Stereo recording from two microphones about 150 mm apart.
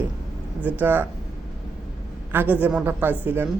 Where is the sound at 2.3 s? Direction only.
10° right (ahead or behind).